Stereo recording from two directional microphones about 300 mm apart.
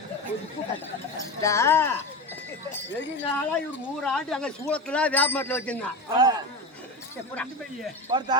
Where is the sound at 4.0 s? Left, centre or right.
Centre.